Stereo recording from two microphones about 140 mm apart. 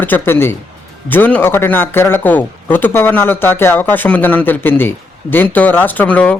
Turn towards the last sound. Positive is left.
turn(degrees=10)  # may be behind; listen again after turning